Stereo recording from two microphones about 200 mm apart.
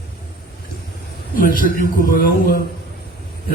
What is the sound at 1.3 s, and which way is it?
Speech, 45° left (ahead or behind).